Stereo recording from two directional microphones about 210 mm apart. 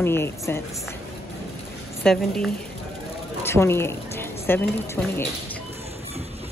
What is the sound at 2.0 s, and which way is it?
A woman's voice, centre (ahead or behind).